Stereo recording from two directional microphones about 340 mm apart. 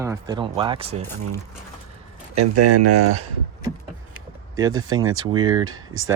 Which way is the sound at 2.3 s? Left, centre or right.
Right.